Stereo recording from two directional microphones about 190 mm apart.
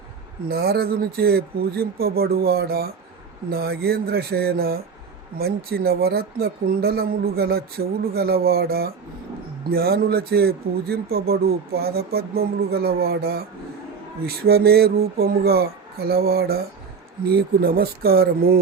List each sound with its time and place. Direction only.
0.4 s speech: 55° right (ahead or behind)